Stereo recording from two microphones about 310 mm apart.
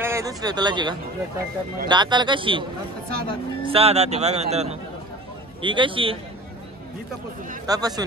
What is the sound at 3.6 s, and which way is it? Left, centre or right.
Speech, centre.